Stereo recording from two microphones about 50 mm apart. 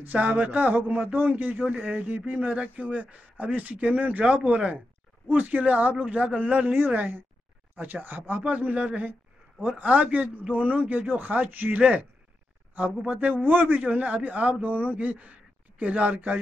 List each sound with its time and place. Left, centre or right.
0.0 s speech: right
1.7 s speech: right
5.3 s speech: right